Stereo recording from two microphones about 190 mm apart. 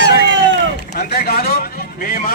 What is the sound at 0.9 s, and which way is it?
Speech, 55° left (ahead or behind).